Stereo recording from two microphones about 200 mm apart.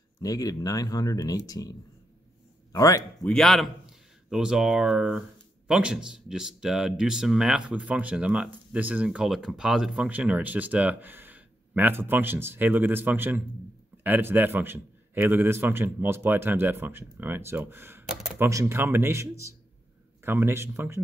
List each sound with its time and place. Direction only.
0.2 s speech: 20° left (ahead or behind)
3.3 s a man's voice: centre (ahead or behind)